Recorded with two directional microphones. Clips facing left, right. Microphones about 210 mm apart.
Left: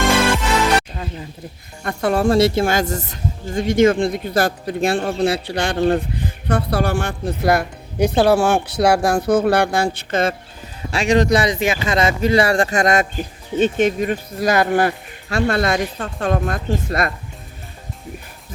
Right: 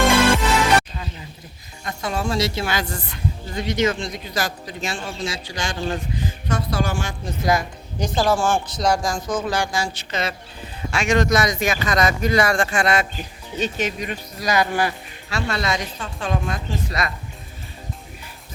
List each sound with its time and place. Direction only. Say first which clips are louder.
1.8 s a woman's voice: left 8 dB; 60° left (ahead or behind)
10.9 s speech: left 4 dB; 35° left (ahead or behind); by 17.1 s 50° left (ahead or behind)